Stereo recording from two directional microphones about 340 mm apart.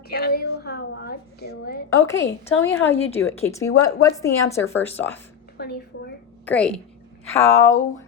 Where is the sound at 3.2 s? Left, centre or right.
Centre.